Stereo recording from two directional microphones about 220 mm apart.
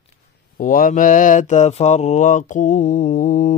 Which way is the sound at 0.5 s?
40° left (ahead or behind).